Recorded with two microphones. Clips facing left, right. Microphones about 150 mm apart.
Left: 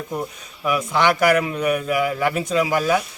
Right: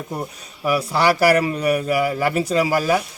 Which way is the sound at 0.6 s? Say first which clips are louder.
Right 1 dB; 35° right (ahead or behind).